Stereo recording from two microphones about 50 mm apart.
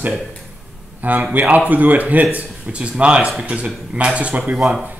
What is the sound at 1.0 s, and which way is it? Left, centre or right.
Speech, right.